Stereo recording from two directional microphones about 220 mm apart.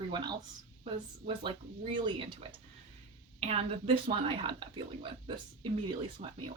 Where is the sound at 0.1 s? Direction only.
20° right (ahead or behind).